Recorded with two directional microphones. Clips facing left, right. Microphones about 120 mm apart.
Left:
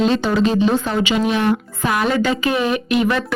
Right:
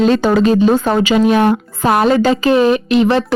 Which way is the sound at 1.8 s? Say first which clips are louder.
Right 7 dB; 35° right (ahead or behind).